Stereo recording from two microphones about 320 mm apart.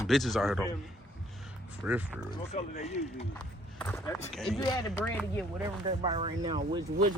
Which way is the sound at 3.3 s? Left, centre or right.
Centre.